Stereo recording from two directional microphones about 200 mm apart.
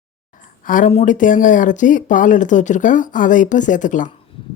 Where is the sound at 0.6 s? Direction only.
40° left (ahead or behind).